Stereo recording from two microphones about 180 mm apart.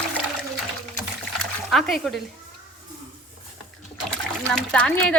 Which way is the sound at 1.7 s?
Centre (ahead or behind).